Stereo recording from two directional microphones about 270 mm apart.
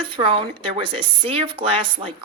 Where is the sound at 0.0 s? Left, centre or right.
Centre.